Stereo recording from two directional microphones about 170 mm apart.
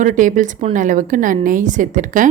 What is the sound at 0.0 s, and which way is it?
A woman's voice, 50° right (ahead or behind).